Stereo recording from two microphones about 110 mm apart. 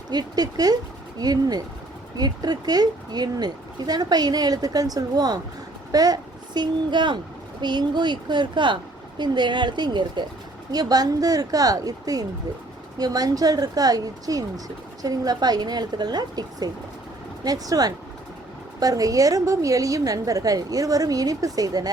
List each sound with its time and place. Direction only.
0.1 s a woman's voice: 35° right (ahead or behind)